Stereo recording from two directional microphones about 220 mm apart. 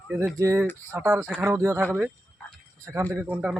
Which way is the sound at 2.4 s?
5° left (ahead or behind).